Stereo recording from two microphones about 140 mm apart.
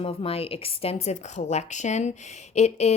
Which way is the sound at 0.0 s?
45° left (ahead or behind).